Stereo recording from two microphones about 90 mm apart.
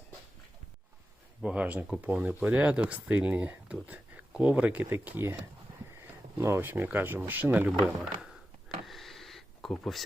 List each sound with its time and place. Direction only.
1.4 s speech: 10° right (ahead or behind)
6.4 s speech: 30° right (ahead or behind)
7.8 s speech: 5° right (ahead or behind)
8.9 s a sound: centre (ahead or behind)